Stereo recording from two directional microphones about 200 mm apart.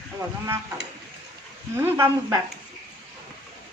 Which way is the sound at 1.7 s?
10° right (ahead or behind).